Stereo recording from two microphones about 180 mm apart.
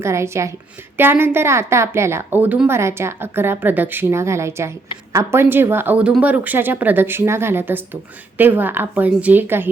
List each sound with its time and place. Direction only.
0.0 s a woman's voice: 15° right (ahead or behind)